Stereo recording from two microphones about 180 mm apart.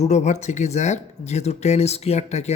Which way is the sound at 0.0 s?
40° left (ahead or behind).